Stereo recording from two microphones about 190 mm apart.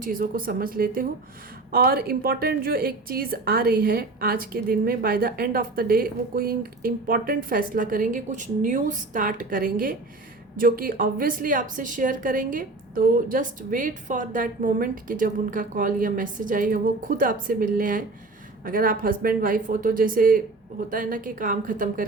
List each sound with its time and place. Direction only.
0.0 s a woman's voice: 45° right (ahead or behind)